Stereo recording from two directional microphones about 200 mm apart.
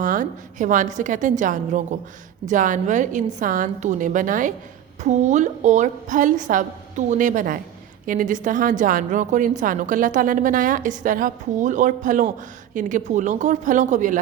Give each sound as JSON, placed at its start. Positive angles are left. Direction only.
{"t": 0.0, "sound": "a woman's voice", "side_deg": -40}